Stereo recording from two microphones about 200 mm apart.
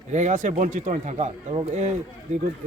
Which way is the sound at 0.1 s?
35° right (ahead or behind).